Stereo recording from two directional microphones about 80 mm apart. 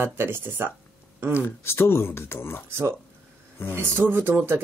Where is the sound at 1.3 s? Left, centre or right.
Left.